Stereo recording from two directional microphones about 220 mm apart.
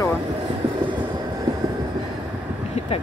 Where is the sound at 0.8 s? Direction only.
20° right (ahead or behind).